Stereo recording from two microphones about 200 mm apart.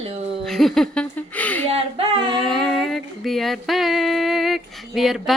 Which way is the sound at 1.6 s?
30° right (ahead or behind).